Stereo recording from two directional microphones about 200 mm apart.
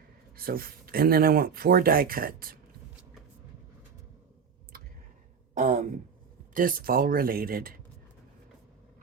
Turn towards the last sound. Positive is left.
turn(degrees=-45)  # may be behind; listen again after turning